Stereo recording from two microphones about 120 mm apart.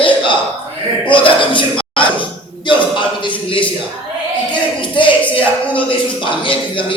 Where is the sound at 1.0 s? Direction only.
45° left (ahead or behind).